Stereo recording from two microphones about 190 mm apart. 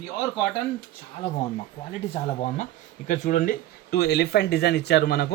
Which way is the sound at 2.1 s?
40° left (ahead or behind).